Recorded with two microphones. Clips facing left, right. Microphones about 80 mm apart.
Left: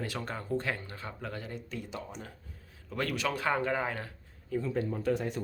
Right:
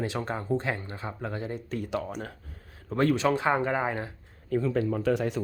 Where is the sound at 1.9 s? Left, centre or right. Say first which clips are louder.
Right 9 dB; right.